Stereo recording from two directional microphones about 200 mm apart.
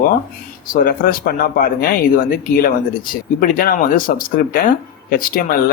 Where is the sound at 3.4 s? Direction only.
45° left (ahead or behind).